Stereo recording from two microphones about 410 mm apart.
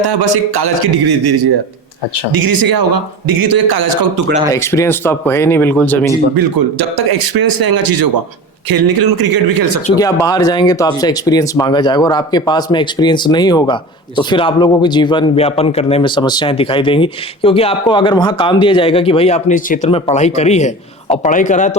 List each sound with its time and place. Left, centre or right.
0.0 s a man's voice: right
4.5 s speech: centre
6.3 s a man's voice: right
9.8 s speech: centre